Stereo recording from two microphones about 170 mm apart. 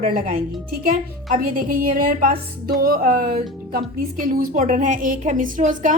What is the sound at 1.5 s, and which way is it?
A woman's voice, 55° right (ahead or behind).